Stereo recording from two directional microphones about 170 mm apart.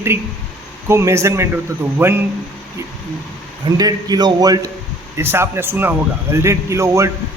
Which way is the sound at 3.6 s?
25° right (ahead or behind).